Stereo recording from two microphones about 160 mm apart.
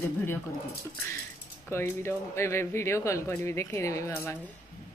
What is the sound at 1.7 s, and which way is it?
Speech, 15° left (ahead or behind).